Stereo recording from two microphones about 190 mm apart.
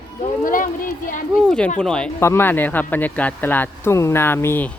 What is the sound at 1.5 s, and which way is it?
Speech, 5° left (ahead or behind).